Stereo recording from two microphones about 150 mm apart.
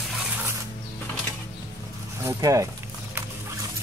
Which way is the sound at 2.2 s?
20° right (ahead or behind).